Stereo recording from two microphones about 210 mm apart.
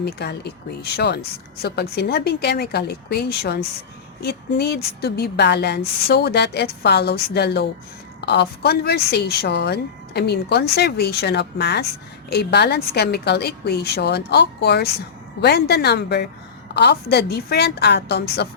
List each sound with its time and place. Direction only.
0.0 s speech: 50° left (ahead or behind)